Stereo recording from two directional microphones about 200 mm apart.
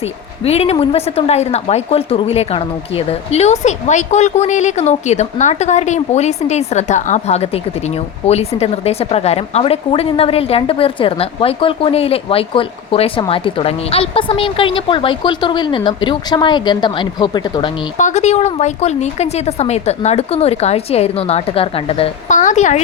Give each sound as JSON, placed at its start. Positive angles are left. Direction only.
{"t": 0.4, "sound": "a woman's voice", "side_deg": 30}
{"t": 17.9, "sound": "a woman's voice", "side_deg": 35}